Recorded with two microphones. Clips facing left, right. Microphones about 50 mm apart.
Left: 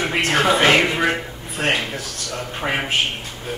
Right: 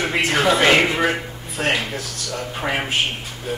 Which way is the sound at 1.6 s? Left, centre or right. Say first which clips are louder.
Even; left.